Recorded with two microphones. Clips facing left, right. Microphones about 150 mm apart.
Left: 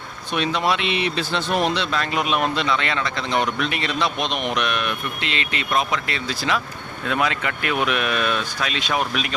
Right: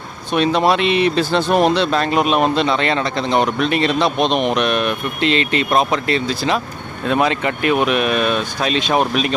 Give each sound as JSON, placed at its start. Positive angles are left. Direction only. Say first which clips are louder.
{"t": 0.3, "sound": "speech", "louder": "right 7 dB", "side_deg": -35}